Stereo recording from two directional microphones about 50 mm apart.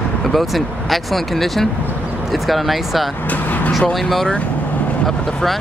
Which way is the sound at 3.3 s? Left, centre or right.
Left.